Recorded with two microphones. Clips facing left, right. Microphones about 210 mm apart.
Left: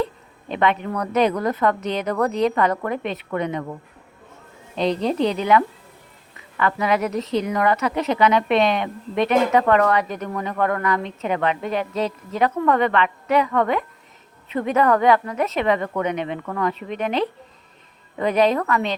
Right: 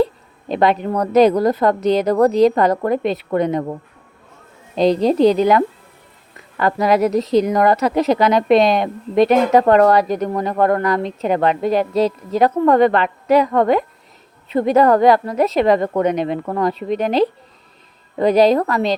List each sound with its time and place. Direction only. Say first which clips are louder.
0.0 s a woman's voice: right 7 dB; 35° right (ahead or behind)